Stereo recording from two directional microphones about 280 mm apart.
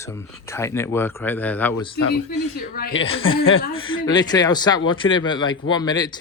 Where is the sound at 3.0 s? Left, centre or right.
Centre.